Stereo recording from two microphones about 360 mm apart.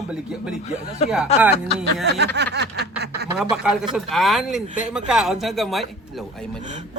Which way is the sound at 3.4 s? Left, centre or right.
Centre.